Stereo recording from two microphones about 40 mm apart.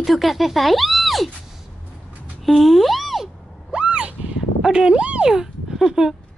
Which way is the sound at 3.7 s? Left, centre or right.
Right.